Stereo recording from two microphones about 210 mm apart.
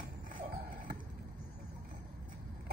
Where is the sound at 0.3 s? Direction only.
45° right (ahead or behind).